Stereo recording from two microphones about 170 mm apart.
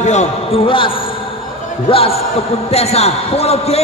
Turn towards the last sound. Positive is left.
turn(degrees=35)  # may be behind; listen again after turning